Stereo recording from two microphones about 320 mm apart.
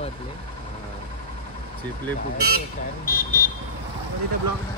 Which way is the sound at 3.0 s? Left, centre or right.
Left.